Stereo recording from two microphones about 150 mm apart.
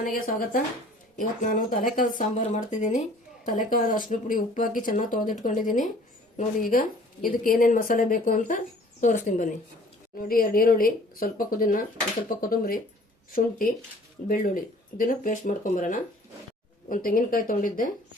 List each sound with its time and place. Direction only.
0.0 s a woman's voice: 70° left (ahead or behind)
3.4 s a woman's voice: 65° left (ahead or behind)
10.2 s speech: 75° left (ahead or behind)
14.3 s a woman's voice: 70° left (ahead or behind)